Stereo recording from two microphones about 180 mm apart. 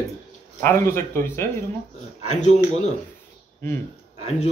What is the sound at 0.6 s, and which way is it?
Speech, 15° left (ahead or behind).